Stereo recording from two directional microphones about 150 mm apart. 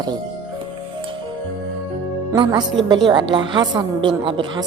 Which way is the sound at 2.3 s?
30° right (ahead or behind).